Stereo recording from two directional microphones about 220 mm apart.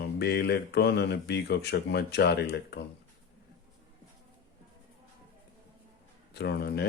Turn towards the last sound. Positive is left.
turn(degrees=45)  # may be behind; listen again after turning